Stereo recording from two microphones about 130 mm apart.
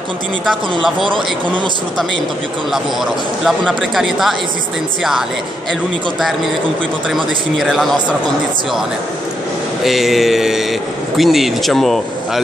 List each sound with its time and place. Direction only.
0.5 s a man's voice: centre (ahead or behind)
1.0 s speech: 40° right (ahead or behind)
2.7 s a man's voice: centre (ahead or behind)
5.7 s a man's voice: centre (ahead or behind)
9.8 s a man's voice: centre (ahead or behind)